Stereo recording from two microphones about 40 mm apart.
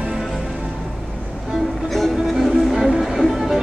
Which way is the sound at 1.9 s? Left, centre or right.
Centre.